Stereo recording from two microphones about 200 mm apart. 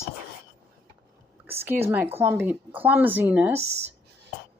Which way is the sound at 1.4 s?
10° right (ahead or behind).